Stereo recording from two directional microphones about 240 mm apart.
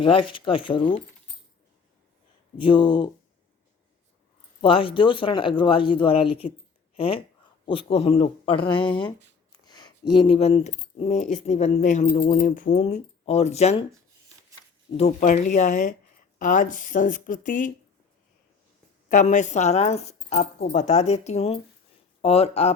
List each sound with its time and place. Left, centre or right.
0.0 s speech: left
2.6 s speech: left
4.6 s speech: left
8.9 s speech: centre
9.5 s speech: centre
14.9 s speech: left
19.0 s speech: left